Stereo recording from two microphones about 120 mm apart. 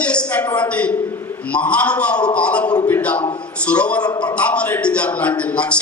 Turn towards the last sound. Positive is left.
turn(degrees=10)  # may be behind; listen again after turning